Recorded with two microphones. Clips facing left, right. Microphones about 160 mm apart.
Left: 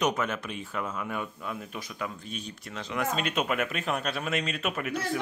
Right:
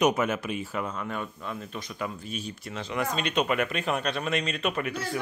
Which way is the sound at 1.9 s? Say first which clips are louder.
Right 3 dB; 5° right (ahead or behind).